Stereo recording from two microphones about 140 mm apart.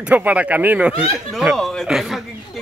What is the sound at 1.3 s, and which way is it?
Speech, centre (ahead or behind).